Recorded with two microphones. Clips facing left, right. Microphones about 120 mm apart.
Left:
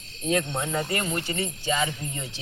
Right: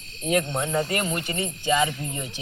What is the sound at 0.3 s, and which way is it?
Speech, 20° right (ahead or behind).